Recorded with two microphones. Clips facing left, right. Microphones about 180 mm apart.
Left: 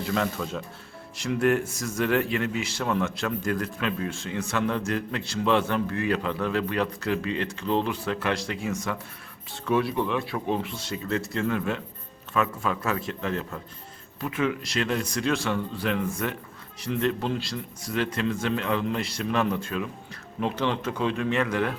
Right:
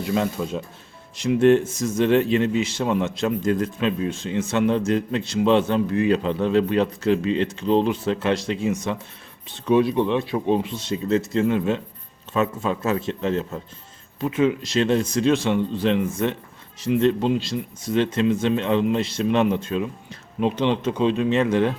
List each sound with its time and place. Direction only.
0.0 s speech: 20° right (ahead or behind)